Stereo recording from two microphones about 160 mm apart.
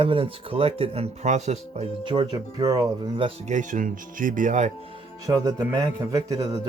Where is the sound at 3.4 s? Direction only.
50° right (ahead or behind).